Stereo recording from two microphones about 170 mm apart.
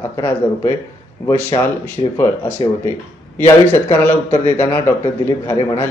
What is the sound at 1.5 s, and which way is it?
Speech, 30° left (ahead or behind).